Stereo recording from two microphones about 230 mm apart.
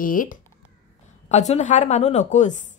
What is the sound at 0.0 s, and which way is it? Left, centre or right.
A woman's voice, left.